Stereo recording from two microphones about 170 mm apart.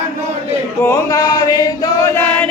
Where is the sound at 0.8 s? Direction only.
15° left (ahead or behind).